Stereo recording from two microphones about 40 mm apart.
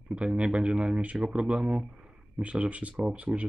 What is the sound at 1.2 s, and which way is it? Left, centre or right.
Speech, centre.